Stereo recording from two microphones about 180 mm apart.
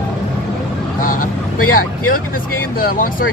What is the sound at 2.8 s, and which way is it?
Speech, 50° left (ahead or behind).